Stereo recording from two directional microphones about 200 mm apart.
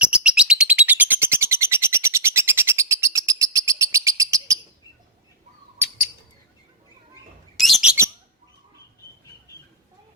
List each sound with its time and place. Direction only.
0.0 s bird: 5° right (ahead or behind)
7.5 s bird: centre (ahead or behind)